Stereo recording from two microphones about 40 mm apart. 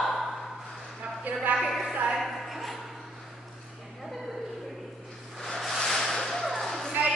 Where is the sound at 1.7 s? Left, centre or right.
Centre.